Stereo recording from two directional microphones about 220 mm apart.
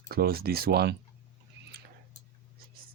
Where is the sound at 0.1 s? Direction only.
45° right (ahead or behind).